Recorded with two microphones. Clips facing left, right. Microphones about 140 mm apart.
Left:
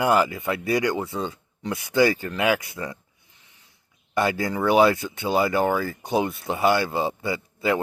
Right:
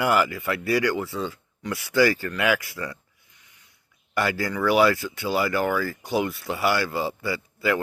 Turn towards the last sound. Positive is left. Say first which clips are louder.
# left 1 dB
turn(degrees=20)  # may be behind; listen again after turning